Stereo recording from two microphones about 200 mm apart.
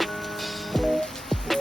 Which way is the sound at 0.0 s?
Centre (ahead or behind).